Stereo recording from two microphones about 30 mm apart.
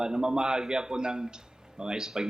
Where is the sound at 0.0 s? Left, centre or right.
Right.